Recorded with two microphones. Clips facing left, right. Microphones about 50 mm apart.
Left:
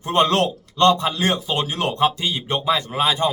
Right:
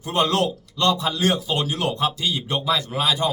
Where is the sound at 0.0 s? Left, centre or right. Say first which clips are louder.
Left 3 dB; left.